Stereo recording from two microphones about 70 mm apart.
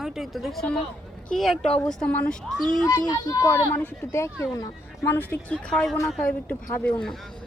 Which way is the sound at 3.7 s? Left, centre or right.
Left.